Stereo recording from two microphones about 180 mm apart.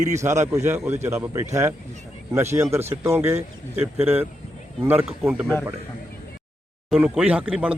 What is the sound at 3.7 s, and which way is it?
Speech, 35° right (ahead or behind).